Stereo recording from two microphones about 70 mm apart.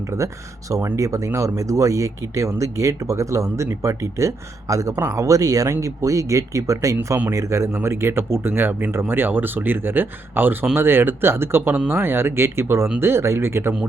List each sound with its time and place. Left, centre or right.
0.9 s speech: right